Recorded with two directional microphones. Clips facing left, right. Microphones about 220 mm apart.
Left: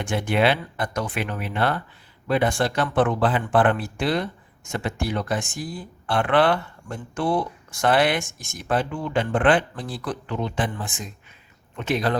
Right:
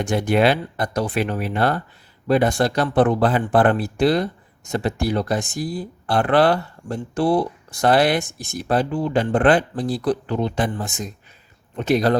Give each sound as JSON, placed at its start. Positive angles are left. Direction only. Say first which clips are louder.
{"t": 0.0, "sound": "speech", "louder": "right 4 dB", "side_deg": -40}